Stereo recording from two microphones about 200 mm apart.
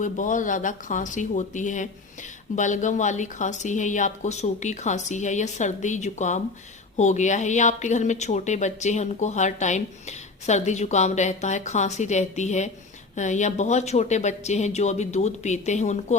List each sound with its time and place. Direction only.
0.0 s speech: 40° left (ahead or behind)